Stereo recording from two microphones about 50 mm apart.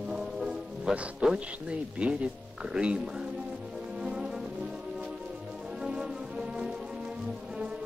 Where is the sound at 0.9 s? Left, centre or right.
Centre.